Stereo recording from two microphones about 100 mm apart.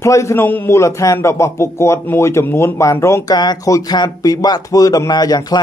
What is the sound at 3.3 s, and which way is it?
Speech, 45° left (ahead or behind).